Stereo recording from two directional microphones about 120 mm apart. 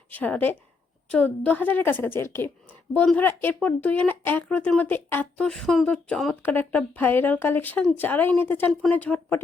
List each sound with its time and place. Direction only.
0.1 s speech: 15° left (ahead or behind)